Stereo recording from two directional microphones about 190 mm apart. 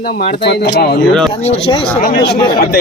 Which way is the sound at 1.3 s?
30° left (ahead or behind).